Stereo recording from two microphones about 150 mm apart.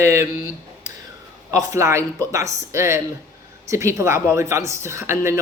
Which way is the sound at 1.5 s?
20° right (ahead or behind).